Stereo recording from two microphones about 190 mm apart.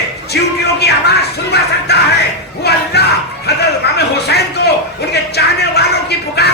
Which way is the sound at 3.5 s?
60° left (ahead or behind).